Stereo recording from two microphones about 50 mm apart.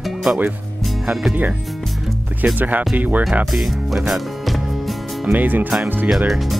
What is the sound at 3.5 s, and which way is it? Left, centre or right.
Music, centre.